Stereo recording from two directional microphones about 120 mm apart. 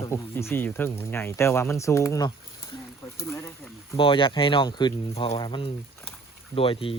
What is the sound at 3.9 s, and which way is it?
Speech, 45° left (ahead or behind).